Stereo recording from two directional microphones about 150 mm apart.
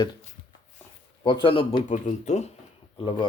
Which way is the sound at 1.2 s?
35° left (ahead or behind).